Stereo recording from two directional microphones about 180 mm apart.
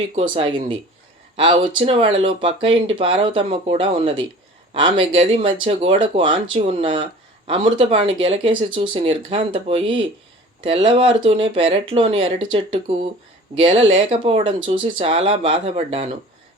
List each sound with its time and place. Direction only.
0.1 s speech: 35° right (ahead or behind)